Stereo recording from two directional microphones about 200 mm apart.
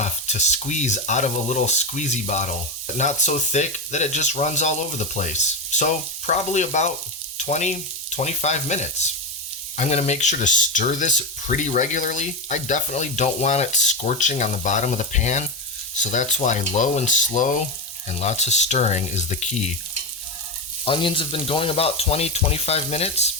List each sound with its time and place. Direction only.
0.0 s speech: 35° left (ahead or behind)
20.8 s speech: 25° left (ahead or behind)